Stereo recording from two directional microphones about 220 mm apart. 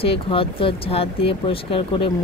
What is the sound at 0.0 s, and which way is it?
Speech, 25° left (ahead or behind).